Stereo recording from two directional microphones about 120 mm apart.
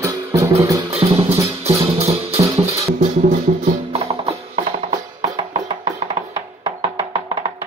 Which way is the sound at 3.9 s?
55° right (ahead or behind).